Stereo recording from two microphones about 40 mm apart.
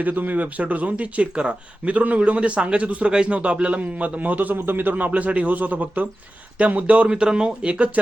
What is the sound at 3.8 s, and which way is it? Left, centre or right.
Speech, right.